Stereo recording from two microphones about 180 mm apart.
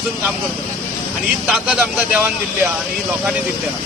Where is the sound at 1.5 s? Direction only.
5° right (ahead or behind).